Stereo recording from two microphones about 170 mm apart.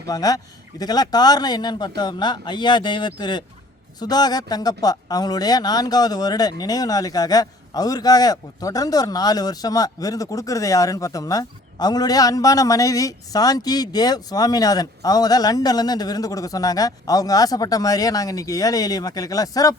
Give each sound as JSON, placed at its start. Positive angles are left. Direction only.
{"t": 0.1, "sound": "speech", "side_deg": 20}